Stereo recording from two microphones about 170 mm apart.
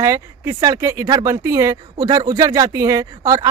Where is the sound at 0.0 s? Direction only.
20° right (ahead or behind).